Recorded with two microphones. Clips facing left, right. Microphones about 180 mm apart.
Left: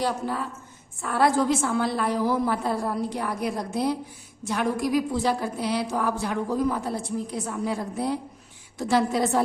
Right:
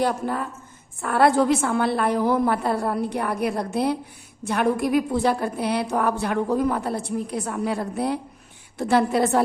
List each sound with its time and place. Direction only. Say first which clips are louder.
0.0 s a woman's voice: right 3 dB; 55° right (ahead or behind)